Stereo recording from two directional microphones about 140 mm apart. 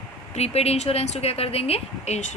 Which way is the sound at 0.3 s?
50° left (ahead or behind).